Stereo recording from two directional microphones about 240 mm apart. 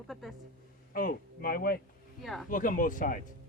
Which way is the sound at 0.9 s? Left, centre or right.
Left.